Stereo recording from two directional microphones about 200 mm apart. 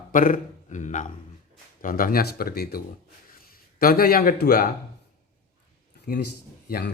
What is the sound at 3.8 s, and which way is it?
Speech, 45° left (ahead or behind).